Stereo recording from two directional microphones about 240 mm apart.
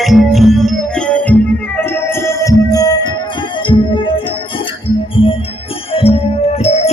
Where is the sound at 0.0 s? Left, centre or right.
Centre; by 4.2 s left.